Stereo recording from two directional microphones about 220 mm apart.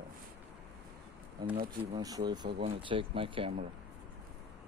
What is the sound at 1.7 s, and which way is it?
Speech, 15° right (ahead or behind).